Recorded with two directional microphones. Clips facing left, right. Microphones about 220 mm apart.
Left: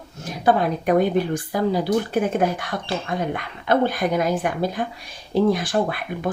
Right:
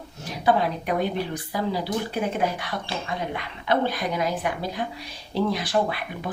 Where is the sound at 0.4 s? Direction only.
50° left (ahead or behind).